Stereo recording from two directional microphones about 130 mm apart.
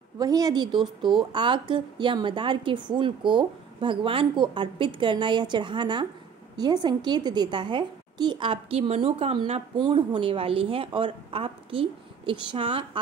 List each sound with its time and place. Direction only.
0.2 s a woman's voice: 30° right (ahead or behind); by 13.0 s 45° right (ahead or behind)